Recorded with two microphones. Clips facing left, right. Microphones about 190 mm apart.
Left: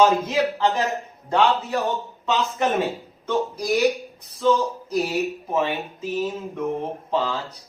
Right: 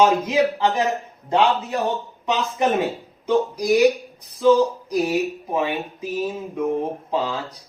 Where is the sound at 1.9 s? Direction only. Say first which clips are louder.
Right 1 dB; 15° right (ahead or behind).